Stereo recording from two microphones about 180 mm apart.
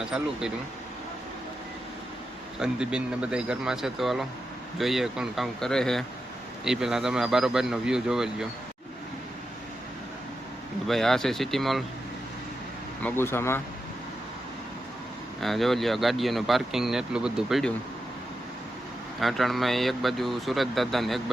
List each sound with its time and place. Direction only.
0.0 s speech: 5° right (ahead or behind)
2.6 s speech: 5° right (ahead or behind)
10.8 s speech: centre (ahead or behind)
13.0 s speech: 10° left (ahead or behind)
15.4 s speech: centre (ahead or behind)
19.2 s speech: centre (ahead or behind)